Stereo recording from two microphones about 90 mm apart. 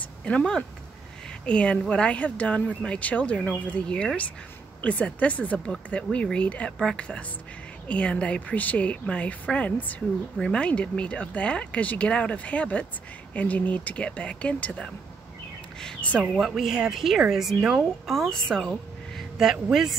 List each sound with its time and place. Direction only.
0.2 s speech: 10° left (ahead or behind)
16.3 s a woman's voice: centre (ahead or behind)